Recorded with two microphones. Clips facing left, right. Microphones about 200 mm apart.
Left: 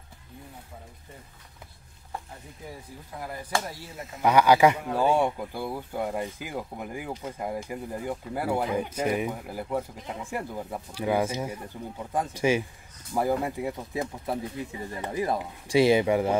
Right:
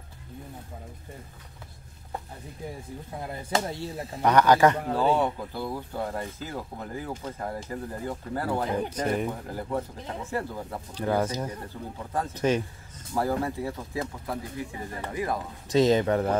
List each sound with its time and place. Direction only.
3.2 s speech: 25° right (ahead or behind)
4.2 s speech: 10° left (ahead or behind); by 15.4 s 25° left (ahead or behind)
15.7 s speech: 10° left (ahead or behind)